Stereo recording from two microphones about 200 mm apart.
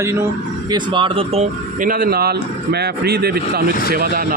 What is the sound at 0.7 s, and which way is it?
Speech, 25° right (ahead or behind).